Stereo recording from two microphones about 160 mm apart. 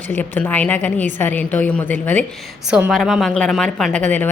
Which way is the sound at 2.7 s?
5° right (ahead or behind).